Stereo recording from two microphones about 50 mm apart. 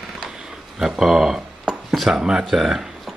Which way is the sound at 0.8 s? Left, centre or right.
Centre.